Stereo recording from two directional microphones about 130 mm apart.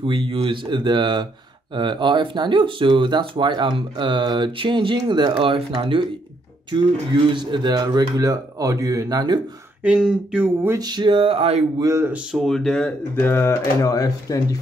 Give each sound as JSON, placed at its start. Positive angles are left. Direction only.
{"t": 0.0, "sound": "speech", "side_deg": -40}
{"t": 7.2, "sound": "speech", "side_deg": -35}
{"t": 9.8, "sound": "speech", "side_deg": -5}
{"t": 10.8, "sound": "speech", "side_deg": -35}
{"t": 11.8, "sound": "speech", "side_deg": -20}
{"t": 12.1, "sound": "speech", "side_deg": 0}